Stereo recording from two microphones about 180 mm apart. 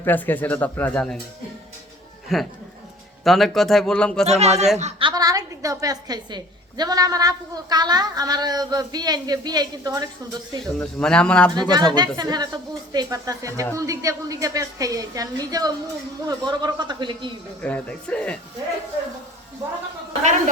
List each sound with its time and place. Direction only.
0.0 s speech: 10° left (ahead or behind)
2.3 s speech: centre (ahead or behind)
4.3 s a woman's voice: 35° right (ahead or behind); by 10.1 s 20° right (ahead or behind)
10.6 s speech: 5° left (ahead or behind)
11.7 s a woman's voice: 25° right (ahead or behind)
17.6 s speech: 5° left (ahead or behind)